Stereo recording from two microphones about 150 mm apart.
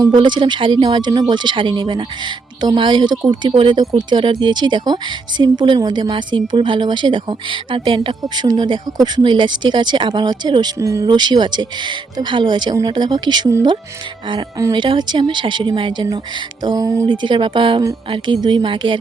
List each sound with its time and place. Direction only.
0.0 s speech: 30° right (ahead or behind)